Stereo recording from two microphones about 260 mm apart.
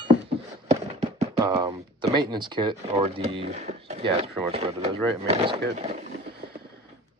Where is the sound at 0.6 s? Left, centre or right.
Right.